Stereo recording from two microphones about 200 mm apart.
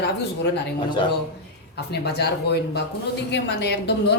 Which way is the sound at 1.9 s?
55° left (ahead or behind).